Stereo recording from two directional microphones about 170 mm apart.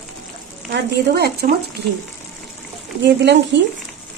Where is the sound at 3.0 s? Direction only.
90° right.